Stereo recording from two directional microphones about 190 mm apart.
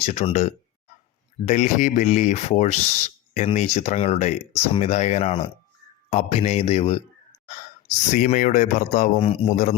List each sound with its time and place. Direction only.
0.0 s speech: 35° left (ahead or behind)
8.1 s speech: 40° left (ahead or behind)